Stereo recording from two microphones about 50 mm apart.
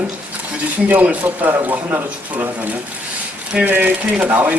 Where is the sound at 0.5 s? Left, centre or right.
Right.